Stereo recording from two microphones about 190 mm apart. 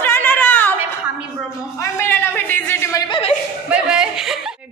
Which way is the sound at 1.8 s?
10° left (ahead or behind).